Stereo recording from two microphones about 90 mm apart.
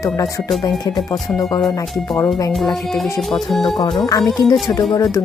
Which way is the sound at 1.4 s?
40° left (ahead or behind).